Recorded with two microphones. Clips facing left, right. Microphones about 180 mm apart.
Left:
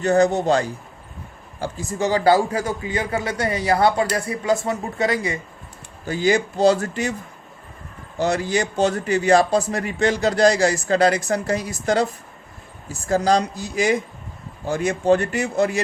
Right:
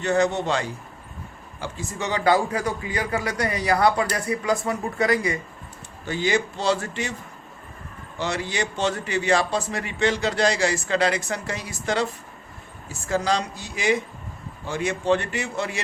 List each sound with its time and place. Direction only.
0.0 s a man's voice: 40° left (ahead or behind)
6.1 s a man's voice: 40° left (ahead or behind)
8.2 s a man's voice: 40° left (ahead or behind)